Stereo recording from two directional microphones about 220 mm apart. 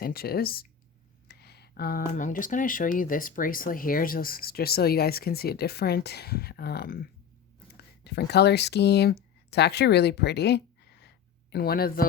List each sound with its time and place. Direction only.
0.0 s speech: 45° left (ahead or behind)